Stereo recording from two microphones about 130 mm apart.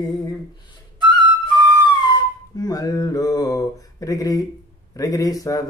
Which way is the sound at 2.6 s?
30° left (ahead or behind).